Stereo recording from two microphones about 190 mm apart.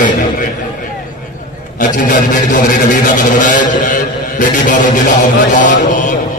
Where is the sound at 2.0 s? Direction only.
45° left (ahead or behind).